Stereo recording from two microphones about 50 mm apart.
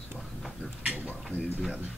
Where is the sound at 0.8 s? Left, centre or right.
Right.